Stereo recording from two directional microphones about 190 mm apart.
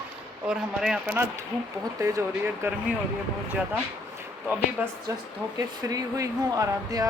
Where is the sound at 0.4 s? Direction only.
5° right (ahead or behind).